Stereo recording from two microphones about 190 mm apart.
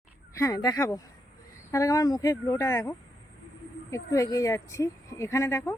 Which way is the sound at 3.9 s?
15° left (ahead or behind).